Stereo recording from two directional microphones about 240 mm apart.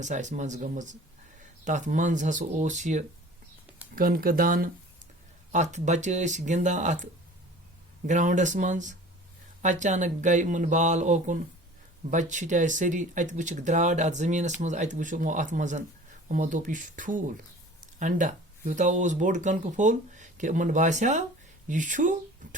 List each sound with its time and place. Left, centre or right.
0.0 s speech: right